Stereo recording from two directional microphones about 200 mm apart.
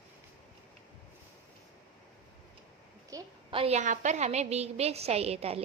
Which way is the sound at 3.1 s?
20° right (ahead or behind).